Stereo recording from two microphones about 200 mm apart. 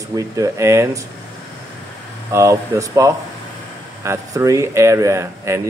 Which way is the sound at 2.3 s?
15° right (ahead or behind).